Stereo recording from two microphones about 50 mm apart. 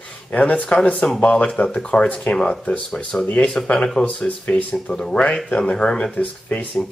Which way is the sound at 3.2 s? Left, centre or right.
Left.